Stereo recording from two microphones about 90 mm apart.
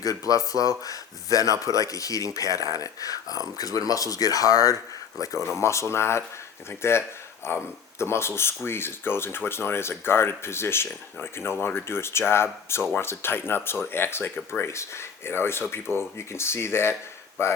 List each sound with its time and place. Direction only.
0.0 s speech: 40° left (ahead or behind)